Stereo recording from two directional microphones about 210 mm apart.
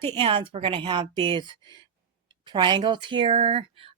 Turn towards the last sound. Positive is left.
turn(degrees=-25)  # may be behind; listen again after turning